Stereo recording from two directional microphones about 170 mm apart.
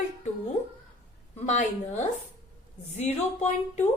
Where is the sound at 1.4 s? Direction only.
45° left (ahead or behind).